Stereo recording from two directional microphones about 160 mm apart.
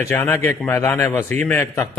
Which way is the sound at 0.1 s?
15° left (ahead or behind).